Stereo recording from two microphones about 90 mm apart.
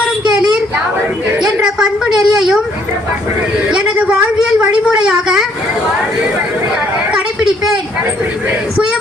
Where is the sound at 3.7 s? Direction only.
15° right (ahead or behind).